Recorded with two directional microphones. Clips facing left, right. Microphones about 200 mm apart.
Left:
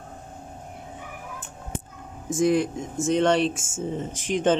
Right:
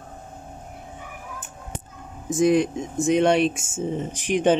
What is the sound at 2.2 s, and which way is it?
Speech, 20° right (ahead or behind).